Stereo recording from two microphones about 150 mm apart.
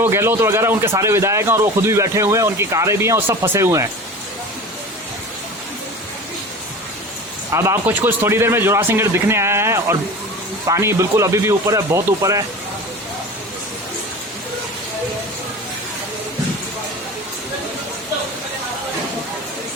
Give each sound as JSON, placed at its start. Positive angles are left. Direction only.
{"t": 0.0, "sound": "a man's voice", "side_deg": -15}
{"t": 7.5, "sound": "a man's voice", "side_deg": -20}